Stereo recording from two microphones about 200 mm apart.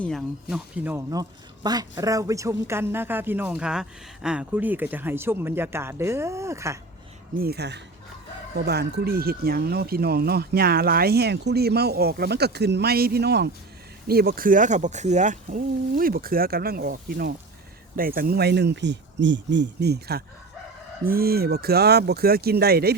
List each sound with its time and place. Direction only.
0.0 s speech: centre (ahead or behind)
0.5 s speech: 10° right (ahead or behind)
7.3 s speech: 50° right (ahead or behind)